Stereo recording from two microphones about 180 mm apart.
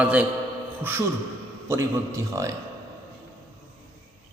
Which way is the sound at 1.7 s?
15° right (ahead or behind).